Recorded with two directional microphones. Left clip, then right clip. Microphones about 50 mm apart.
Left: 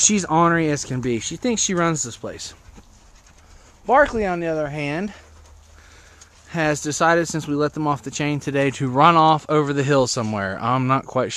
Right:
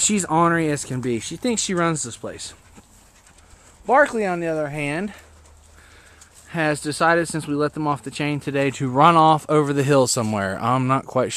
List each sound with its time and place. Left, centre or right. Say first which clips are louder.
0.2 s speech: right 2 dB; centre
3.8 s speech: left 1 dB; centre
4.9 s speech: even; centre
6.1 s speech: even; left
8.9 s speech: even; right
10.8 s speech: left 1 dB; centre